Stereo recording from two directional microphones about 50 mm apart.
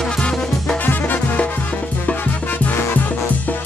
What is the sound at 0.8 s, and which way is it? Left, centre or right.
Music, left.